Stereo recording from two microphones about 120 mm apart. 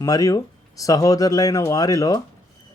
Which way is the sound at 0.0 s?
30° left (ahead or behind).